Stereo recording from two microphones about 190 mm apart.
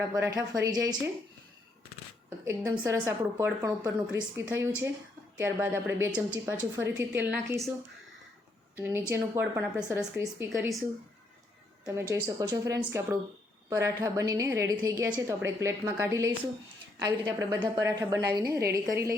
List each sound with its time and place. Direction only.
0.0 s a woman's voice: 15° right (ahead or behind)
2.5 s a woman's voice: 15° right (ahead or behind)
8.7 s a woman's voice: 10° right (ahead or behind)
10.5 s speech: centre (ahead or behind)
11.9 s a woman's voice: 15° right (ahead or behind)